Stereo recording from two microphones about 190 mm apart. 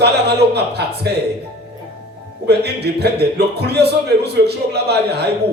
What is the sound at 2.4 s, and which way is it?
A man's voice, 60° right (ahead or behind).